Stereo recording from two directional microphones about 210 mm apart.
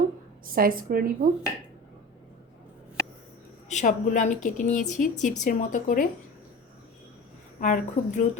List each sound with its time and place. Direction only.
0.4 s a woman's voice: 45° right (ahead or behind)
3.7 s a woman's voice: 35° left (ahead or behind)
7.6 s a woman's voice: 35° left (ahead or behind)